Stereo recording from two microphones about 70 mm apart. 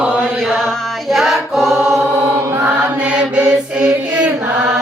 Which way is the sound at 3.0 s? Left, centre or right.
Centre.